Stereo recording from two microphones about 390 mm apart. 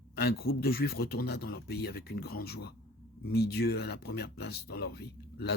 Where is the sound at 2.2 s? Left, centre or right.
Left.